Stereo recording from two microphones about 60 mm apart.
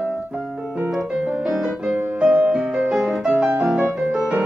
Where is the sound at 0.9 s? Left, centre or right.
Centre.